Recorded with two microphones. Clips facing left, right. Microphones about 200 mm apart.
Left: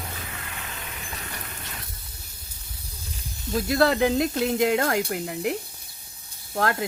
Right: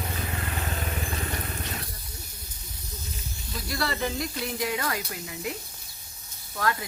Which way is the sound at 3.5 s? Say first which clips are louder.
Left 10 dB; 55° left (ahead or behind).